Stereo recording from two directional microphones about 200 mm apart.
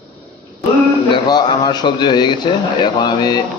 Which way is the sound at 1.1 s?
20° left (ahead or behind).